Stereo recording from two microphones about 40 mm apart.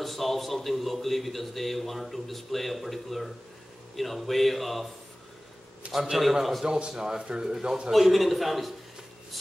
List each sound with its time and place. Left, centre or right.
0.0 s a man's voice: centre
5.8 s a man's voice: right
6.6 s a man's voice: centre
7.9 s a man's voice: centre